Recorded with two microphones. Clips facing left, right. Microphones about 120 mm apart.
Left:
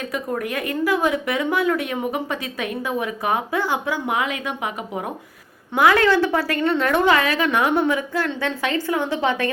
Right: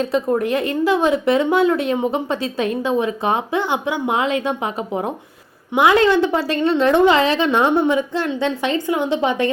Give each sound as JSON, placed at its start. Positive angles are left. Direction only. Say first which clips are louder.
{"t": 0.0, "sound": "a woman's voice", "louder": "right 7 dB", "side_deg": -25}